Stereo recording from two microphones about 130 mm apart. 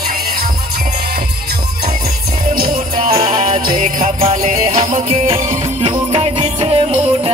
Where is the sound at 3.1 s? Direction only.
55° right (ahead or behind).